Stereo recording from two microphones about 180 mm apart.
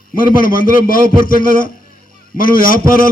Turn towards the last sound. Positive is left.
turn(degrees=50)  # may be behind; listen again after turning